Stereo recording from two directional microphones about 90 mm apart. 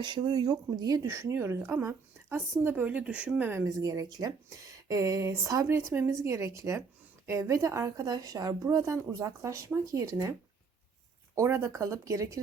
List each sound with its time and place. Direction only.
0.0 s speech: 55° right (ahead or behind)
1.0 s speech: 30° right (ahead or behind); by 3.5 s 15° right (ahead or behind)
3.8 s speech: 40° right (ahead or behind)
11.3 s speech: 30° right (ahead or behind)